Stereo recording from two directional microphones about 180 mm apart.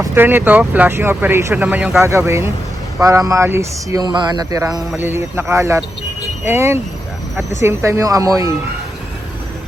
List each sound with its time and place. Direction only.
0.0 s speech: 15° right (ahead or behind)